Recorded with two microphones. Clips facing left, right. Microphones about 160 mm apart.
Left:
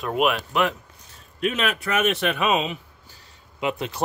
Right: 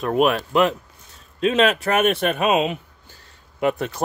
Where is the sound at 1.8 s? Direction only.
55° right (ahead or behind).